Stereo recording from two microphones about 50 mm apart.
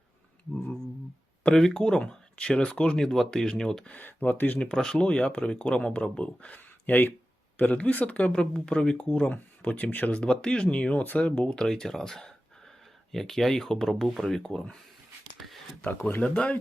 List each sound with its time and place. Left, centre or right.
1.5 s speech: centre
3.0 s speech: centre
3.2 s speech: centre
4.0 s speech: left
4.6 s speech: centre
8.4 s speech: centre; by 10.2 s left
10.2 s speech: centre
10.9 s speech: left
11.4 s speech: centre
15.4 s a sound: centre
15.9 s speech: left
16.2 s speech: left